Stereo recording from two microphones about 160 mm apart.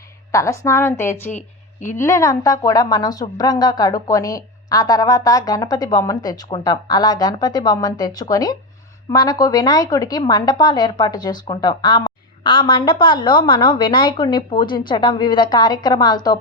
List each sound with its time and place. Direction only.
0.3 s a woman's voice: 20° left (ahead or behind)
1.3 s speech: 50° left (ahead or behind)
2.0 s a woman's voice: 20° left (ahead or behind)